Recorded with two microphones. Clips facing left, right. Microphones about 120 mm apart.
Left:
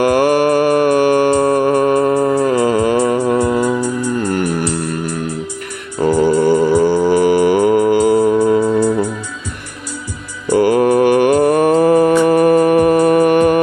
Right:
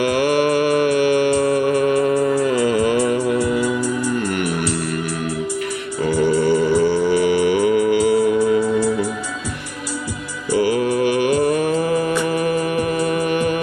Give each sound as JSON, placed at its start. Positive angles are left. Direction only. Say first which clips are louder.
{"t": 0.0, "sound": "music", "louder": "left 5 dB", "side_deg": 45}
{"t": 4.3, "sound": "music", "louder": "left 4 dB", "side_deg": 35}
{"t": 6.0, "sound": "music", "louder": "left 5 dB", "side_deg": 50}
{"t": 10.5, "sound": "mantra", "louder": "left 6 dB", "side_deg": 50}